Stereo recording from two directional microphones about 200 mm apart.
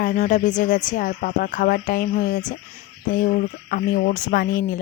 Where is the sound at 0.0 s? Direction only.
40° left (ahead or behind).